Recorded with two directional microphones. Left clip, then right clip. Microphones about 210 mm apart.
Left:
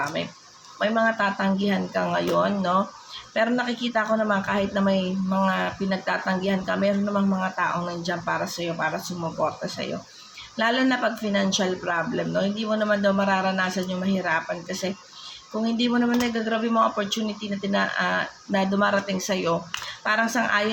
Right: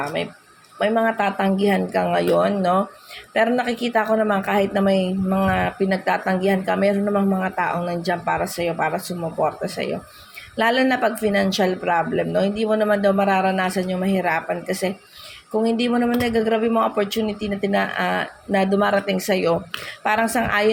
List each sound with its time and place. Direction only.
0.0 s a woman's voice: 25° right (ahead or behind)